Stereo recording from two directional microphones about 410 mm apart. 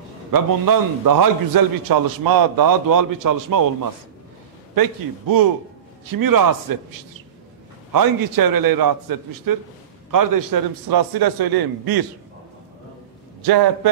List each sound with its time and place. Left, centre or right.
0.3 s a man's voice: right